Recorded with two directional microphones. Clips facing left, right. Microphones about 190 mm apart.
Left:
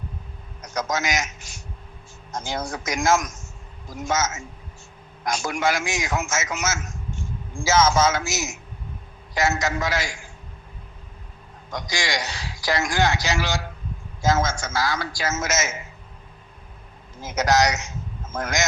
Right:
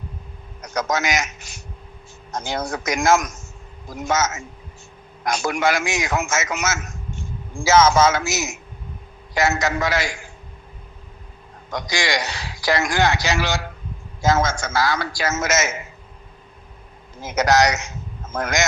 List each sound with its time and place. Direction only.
0.6 s a man's voice: 65° right (ahead or behind)
11.7 s a man's voice: 65° right (ahead or behind)
17.2 s a man's voice: 65° right (ahead or behind)